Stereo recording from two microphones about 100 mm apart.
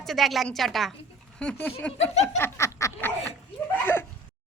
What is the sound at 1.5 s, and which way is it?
A woman's voice, 20° left (ahead or behind).